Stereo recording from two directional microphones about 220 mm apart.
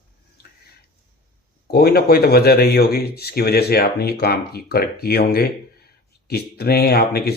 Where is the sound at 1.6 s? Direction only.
45° left (ahead or behind).